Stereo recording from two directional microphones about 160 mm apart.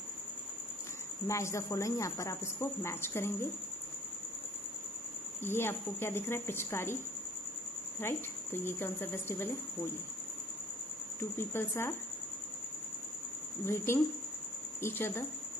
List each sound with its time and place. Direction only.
1.2 s speech: 20° left (ahead or behind)
5.4 s speech: 15° left (ahead or behind)
8.0 s speech: 15° left (ahead or behind)
11.1 s speech: 15° left (ahead or behind)
13.7 s speech: 15° left (ahead or behind)